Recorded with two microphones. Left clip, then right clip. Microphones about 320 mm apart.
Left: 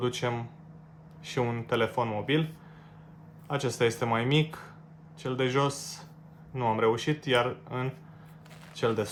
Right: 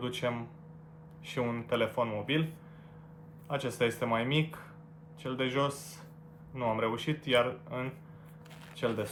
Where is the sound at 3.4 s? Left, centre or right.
Left.